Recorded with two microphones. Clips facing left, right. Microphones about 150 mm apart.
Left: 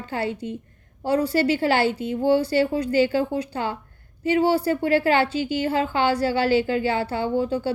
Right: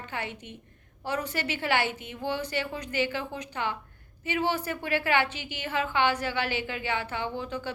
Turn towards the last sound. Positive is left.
turn(degrees=30)  # may be behind; listen again after turning